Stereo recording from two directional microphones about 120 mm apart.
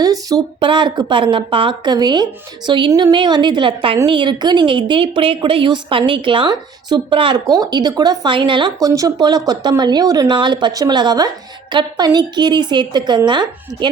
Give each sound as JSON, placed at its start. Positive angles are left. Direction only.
{"t": 0.0, "sound": "a sound", "side_deg": -30}
{"t": 0.6, "sound": "a woman's voice", "side_deg": -40}
{"t": 7.5, "sound": "speech", "side_deg": -35}